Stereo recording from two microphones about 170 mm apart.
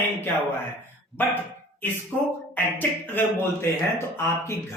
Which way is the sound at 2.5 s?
10° left (ahead or behind).